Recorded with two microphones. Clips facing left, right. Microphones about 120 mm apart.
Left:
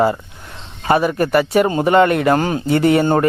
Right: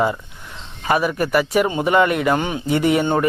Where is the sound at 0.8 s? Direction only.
30° left (ahead or behind).